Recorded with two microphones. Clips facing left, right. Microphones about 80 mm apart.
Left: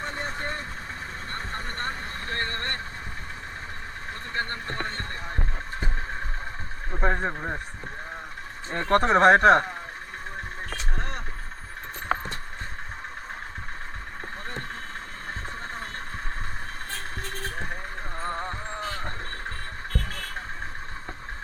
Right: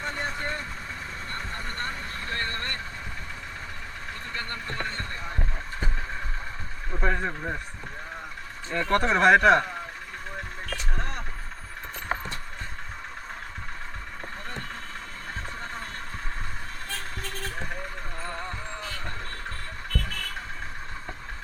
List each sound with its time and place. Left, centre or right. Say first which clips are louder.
0.0 s vehicle: even; left
4.4 s a sound: left 4 dB; left
7.0 s a sound: left 2 dB; left
8.7 s speech: left 3 dB; left
10.9 s vehicle: left 1 dB; left
18.2 s vehicle: left 4 dB; left